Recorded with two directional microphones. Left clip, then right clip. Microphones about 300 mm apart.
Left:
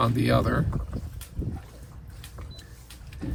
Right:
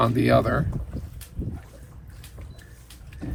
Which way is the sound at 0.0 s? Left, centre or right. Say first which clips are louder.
Right 4 dB; centre.